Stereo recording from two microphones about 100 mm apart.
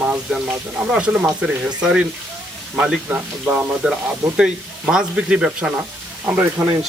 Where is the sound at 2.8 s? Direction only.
10° right (ahead or behind).